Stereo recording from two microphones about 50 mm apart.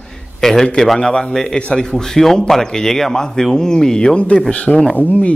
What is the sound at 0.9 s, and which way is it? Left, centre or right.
A man's voice, centre.